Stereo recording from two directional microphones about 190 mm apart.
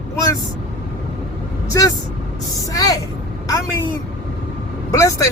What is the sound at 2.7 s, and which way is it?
A woman's voice, 20° left (ahead or behind).